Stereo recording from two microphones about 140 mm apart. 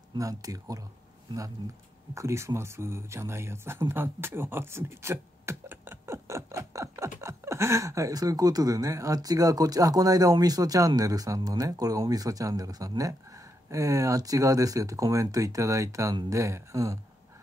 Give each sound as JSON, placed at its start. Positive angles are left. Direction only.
{"t": 0.1, "sound": "speech", "side_deg": -25}
{"t": 2.1, "sound": "speech", "side_deg": -20}
{"t": 3.9, "sound": "a sound", "side_deg": -15}
{"t": 7.2, "sound": "speech", "side_deg": -20}